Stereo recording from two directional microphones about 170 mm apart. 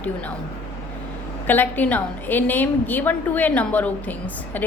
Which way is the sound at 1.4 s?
10° left (ahead or behind).